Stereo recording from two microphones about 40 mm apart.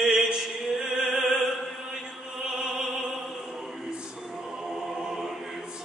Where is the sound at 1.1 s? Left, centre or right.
Centre.